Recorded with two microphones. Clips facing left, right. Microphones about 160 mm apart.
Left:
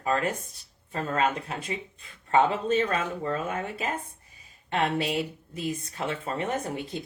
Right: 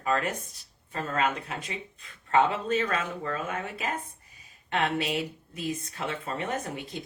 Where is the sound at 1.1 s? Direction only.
30° left (ahead or behind).